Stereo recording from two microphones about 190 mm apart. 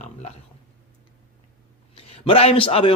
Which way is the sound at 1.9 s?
30° left (ahead or behind).